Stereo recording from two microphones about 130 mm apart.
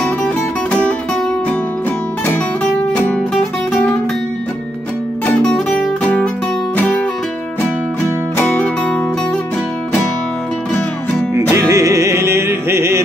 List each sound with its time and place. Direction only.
0.2 s music: 10° left (ahead or behind)
2.2 s music: 10° left (ahead or behind)
5.2 s music: 10° left (ahead or behind)
8.4 s music: 10° left (ahead or behind)
11.5 s music: 20° right (ahead or behind)